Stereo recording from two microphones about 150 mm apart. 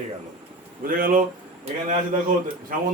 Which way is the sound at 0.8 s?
70° right (ahead or behind).